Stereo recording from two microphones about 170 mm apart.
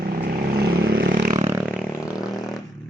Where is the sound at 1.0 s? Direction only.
85° right.